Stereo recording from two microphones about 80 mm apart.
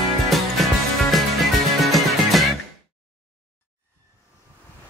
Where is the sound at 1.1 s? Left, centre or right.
Centre.